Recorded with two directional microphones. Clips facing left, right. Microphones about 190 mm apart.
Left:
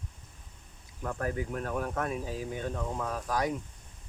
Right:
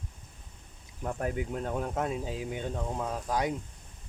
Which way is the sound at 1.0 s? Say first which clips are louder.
Right 1 dB; 20° right (ahead or behind).